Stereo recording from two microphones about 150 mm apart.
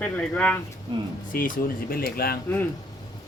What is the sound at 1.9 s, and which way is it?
Speech, 90° left.